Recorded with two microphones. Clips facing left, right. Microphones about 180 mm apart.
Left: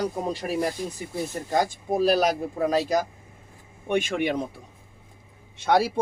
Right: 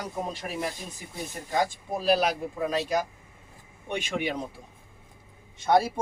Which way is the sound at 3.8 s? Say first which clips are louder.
Left 6 dB; 50° left (ahead or behind).